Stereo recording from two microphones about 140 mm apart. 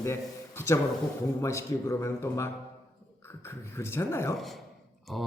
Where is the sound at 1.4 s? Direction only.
20° left (ahead or behind).